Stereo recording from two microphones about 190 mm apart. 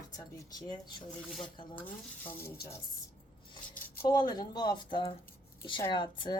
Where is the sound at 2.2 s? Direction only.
10° left (ahead or behind).